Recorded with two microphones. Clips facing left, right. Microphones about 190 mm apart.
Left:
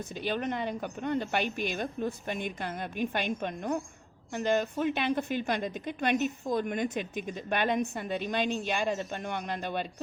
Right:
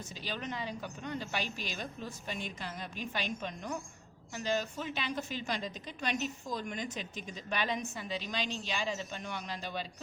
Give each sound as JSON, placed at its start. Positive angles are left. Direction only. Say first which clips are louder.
{"t": 0.3, "sound": "a woman's voice", "louder": "left 7 dB", "side_deg": 55}